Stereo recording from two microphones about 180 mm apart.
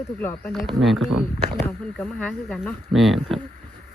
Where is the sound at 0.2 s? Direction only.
10° left (ahead or behind).